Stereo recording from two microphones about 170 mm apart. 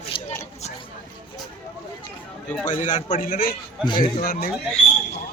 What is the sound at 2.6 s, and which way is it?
A man's voice, 50° left (ahead or behind).